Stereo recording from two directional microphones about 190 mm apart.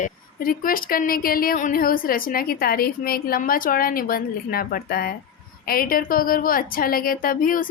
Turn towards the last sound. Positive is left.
turn(degrees=45)  # may be behind; listen again after turning